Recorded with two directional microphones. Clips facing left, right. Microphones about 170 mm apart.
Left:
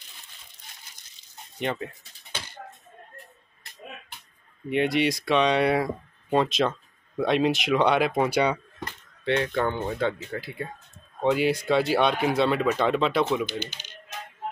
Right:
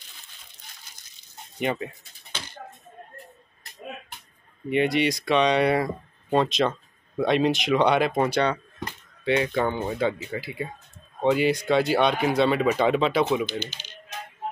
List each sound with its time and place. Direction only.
1.6 s speech: 5° right (ahead or behind)
4.6 s speech: centre (ahead or behind)
9.2 s speech: 5° right (ahead or behind)